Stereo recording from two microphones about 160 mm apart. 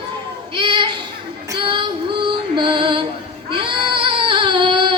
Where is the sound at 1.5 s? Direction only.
30° right (ahead or behind).